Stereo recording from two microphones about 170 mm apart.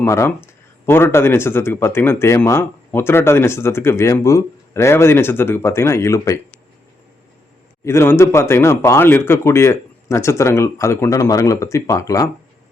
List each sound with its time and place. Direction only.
0.0 s speech: 15° left (ahead or behind)
7.9 s speech: 15° left (ahead or behind)